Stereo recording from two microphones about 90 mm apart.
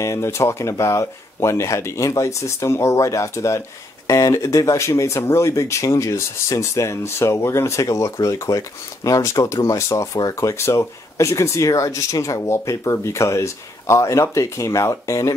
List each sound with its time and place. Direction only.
0.0 s speech: 35° left (ahead or behind)